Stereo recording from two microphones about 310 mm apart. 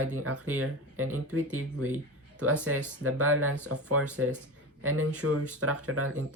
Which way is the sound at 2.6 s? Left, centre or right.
Right.